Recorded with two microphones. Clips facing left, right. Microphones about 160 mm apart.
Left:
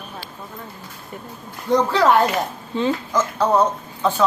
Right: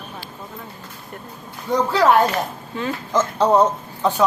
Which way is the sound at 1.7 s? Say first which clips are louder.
Even; 5° right (ahead or behind).